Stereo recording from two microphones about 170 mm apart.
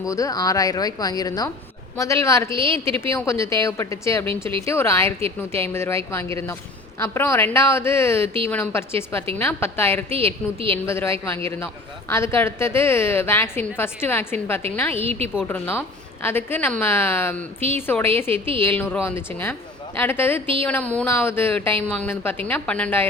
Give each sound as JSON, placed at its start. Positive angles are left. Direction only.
{"t": 0.0, "sound": "a woman's voice", "side_deg": 20}
{"t": 2.5, "sound": "a woman's voice", "side_deg": -30}
{"t": 2.7, "sound": "a woman's voice", "side_deg": 15}